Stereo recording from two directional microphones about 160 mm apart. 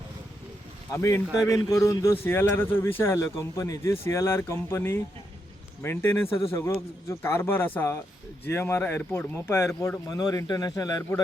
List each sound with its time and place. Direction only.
0.9 s speech: 20° left (ahead or behind)